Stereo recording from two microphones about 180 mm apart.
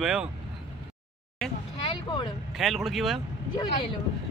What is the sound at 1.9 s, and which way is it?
Vehicle, 25° left (ahead or behind).